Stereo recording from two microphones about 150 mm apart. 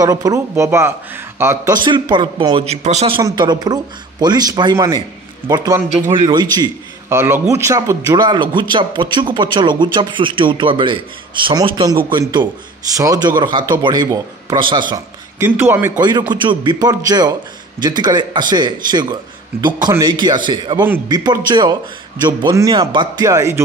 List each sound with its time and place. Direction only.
0.0 s a man's voice: 25° right (ahead or behind)
1.9 s speech: 30° right (ahead or behind); by 3.2 s 45° right (ahead or behind)
3.2 s a man's voice: 30° right (ahead or behind)
6.1 s a man's voice: 30° right (ahead or behind)
7.1 s a man's voice: 15° right (ahead or behind); by 15.0 s 30° right (ahead or behind)
15.3 s a man's voice: 15° right (ahead or behind)
16.0 s a man's voice: 30° right (ahead or behind)